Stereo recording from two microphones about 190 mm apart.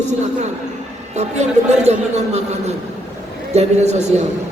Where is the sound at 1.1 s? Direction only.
35° right (ahead or behind).